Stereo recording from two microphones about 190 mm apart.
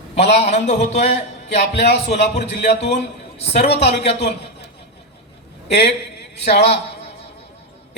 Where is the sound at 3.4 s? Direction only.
60° left (ahead or behind).